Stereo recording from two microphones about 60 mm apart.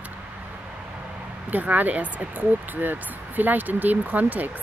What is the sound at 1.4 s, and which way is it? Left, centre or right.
Speech, right.